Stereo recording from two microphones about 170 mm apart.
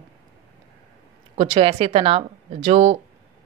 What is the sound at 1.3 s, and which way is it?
A woman's voice, 35° right (ahead or behind).